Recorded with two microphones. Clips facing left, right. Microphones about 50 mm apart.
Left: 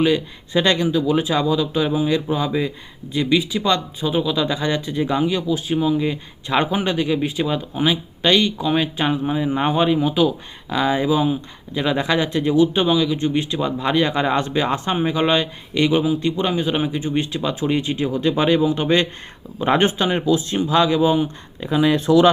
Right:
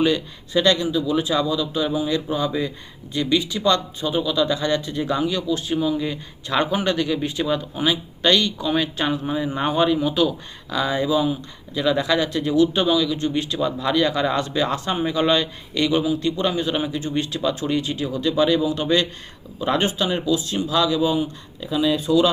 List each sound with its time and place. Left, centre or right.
0.5 s speech: left
21.7 s speech: left